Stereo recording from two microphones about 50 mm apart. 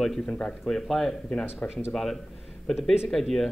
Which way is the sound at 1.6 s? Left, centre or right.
Left.